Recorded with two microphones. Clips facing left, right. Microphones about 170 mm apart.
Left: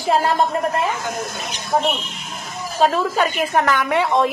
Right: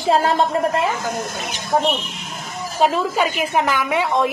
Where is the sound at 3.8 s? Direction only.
Centre (ahead or behind).